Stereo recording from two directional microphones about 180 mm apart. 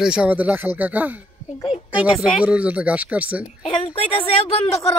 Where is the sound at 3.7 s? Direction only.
30° left (ahead or behind).